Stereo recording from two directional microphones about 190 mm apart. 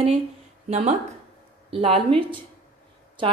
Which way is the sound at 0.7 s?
35° right (ahead or behind).